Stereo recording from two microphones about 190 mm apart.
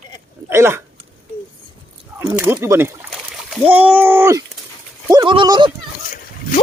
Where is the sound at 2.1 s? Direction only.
10° right (ahead or behind).